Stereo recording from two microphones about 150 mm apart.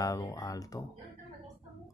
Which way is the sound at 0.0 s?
25° left (ahead or behind).